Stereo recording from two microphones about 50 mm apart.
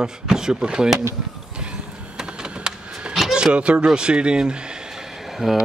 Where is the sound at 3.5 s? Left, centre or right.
Right.